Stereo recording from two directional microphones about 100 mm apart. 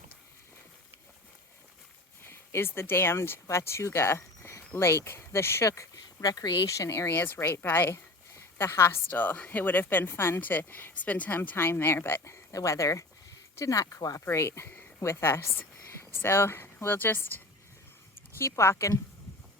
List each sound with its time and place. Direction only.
2.2 s speech: 25° left (ahead or behind)
14.3 s a woman's voice: 25° left (ahead or behind)